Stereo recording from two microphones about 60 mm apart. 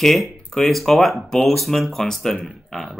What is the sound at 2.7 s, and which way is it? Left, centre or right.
Burping, centre.